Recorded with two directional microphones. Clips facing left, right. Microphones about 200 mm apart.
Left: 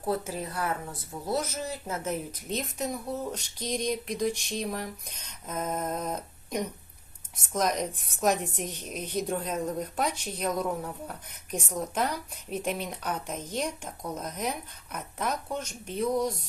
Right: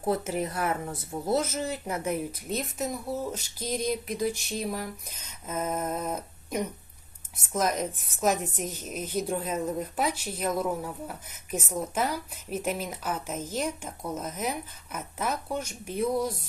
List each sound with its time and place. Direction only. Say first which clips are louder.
0.0 s speech: right 3 dB; 20° right (ahead or behind)
2.0 s a woman's voice: right 2 dB; 10° right (ahead or behind)